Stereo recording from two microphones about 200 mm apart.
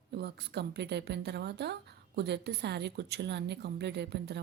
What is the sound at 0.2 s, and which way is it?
A woman's voice, 55° right (ahead or behind).